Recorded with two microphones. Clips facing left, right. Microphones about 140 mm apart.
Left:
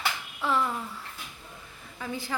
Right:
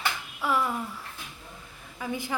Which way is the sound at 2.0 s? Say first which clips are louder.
Right 2 dB; 15° right (ahead or behind).